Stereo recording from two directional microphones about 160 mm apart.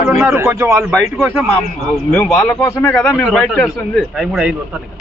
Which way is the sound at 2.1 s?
15° left (ahead or behind).